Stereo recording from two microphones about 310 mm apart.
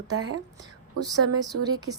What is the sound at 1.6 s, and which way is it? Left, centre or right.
Speech, centre.